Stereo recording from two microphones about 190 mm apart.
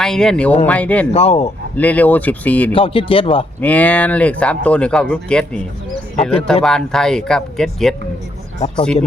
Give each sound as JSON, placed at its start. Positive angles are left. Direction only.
{"t": 0.0, "sound": "speech", "side_deg": 5}
{"t": 1.1, "sound": "speech", "side_deg": 35}
{"t": 1.7, "sound": "speech", "side_deg": 10}
{"t": 2.7, "sound": "speech", "side_deg": 30}
{"t": 3.6, "sound": "speech", "side_deg": 10}
{"t": 8.5, "sound": "speech", "side_deg": 35}